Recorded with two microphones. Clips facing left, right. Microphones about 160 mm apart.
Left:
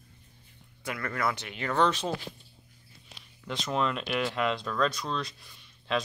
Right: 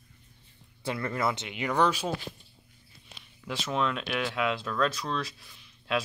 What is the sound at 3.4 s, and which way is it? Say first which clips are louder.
Speech: even; 5° right (ahead or behind).